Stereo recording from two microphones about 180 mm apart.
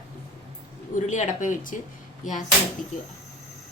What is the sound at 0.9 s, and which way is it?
Speech, 40° left (ahead or behind).